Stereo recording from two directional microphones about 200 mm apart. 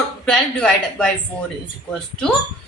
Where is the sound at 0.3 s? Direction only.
5° left (ahead or behind).